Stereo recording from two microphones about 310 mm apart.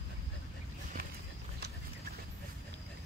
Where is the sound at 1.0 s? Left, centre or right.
Right.